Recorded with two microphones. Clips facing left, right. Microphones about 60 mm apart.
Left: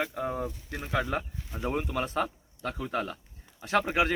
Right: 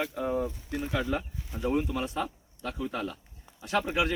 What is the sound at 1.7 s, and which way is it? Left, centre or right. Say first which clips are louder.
Speech: even; left.